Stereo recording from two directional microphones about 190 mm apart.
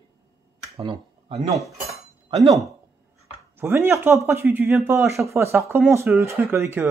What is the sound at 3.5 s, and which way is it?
Speech, 10° right (ahead or behind).